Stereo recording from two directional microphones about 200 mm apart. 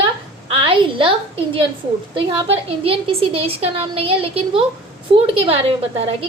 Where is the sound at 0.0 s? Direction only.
25° right (ahead or behind).